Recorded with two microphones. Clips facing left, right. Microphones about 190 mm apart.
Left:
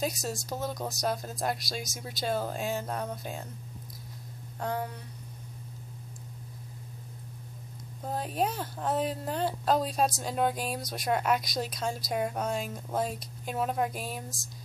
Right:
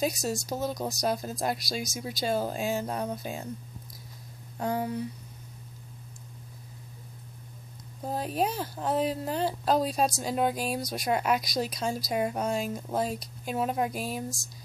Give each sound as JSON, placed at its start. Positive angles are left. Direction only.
{"t": 0.0, "sound": "a woman's voice", "side_deg": 0}
{"t": 4.6, "sound": "speech", "side_deg": -10}
{"t": 8.0, "sound": "a woman's voice", "side_deg": -5}